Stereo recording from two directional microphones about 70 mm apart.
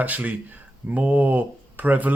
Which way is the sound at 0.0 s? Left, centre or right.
Right.